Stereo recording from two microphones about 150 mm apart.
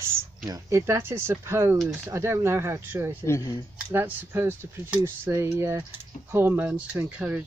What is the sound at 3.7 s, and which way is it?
Speech, 15° right (ahead or behind).